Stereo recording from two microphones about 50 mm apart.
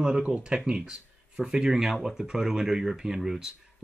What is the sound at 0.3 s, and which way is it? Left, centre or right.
Speech, centre.